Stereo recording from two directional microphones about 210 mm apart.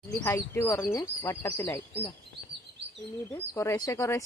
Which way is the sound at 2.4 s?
50° right (ahead or behind).